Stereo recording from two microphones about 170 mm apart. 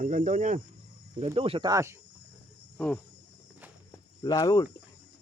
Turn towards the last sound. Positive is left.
turn(degrees=20)  # may be behind; listen again after turning